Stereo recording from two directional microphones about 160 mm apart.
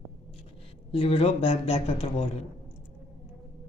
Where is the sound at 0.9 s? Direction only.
35° left (ahead or behind).